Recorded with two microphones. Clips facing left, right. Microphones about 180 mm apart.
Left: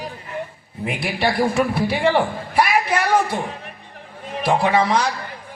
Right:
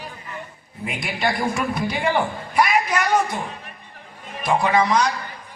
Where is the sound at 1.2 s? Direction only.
30° left (ahead or behind).